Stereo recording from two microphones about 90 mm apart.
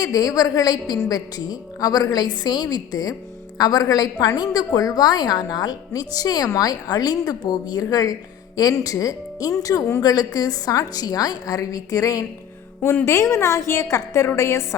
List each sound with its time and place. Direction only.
0.0 s a woman's voice: 40° left (ahead or behind)